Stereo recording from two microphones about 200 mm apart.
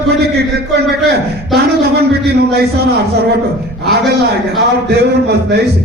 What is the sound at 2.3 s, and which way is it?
Speech, 55° right (ahead or behind).